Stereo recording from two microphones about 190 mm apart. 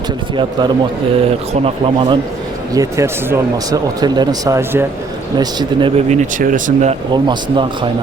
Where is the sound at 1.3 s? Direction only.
30° right (ahead or behind).